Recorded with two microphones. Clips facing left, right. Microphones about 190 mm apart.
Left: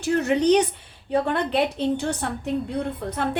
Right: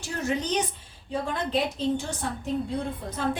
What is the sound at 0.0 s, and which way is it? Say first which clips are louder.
A woman's voice: left 9 dB; 65° left (ahead or behind).